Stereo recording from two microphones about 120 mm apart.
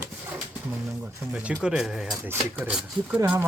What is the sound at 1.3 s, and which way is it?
Speech, 10° right (ahead or behind).